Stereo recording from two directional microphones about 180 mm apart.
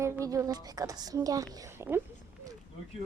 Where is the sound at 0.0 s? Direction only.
15° right (ahead or behind).